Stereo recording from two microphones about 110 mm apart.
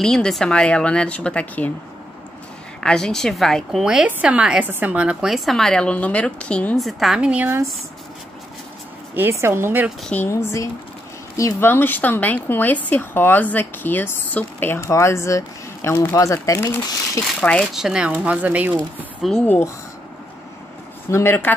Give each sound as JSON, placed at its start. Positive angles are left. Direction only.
{"t": 0.0, "sound": "speech", "side_deg": 5}
{"t": 2.8, "sound": "speech", "side_deg": 5}
{"t": 3.8, "sound": "speech", "side_deg": -10}
{"t": 6.8, "sound": "speech", "side_deg": 0}
{"t": 9.1, "sound": "a woman's voice", "side_deg": -20}
{"t": 10.2, "sound": "speech", "side_deg": 25}
{"t": 17.4, "sound": "speech", "side_deg": 10}
{"t": 17.7, "sound": "speech", "side_deg": -5}
{"t": 19.2, "sound": "speech", "side_deg": 0}
{"t": 21.1, "sound": "speech", "side_deg": 20}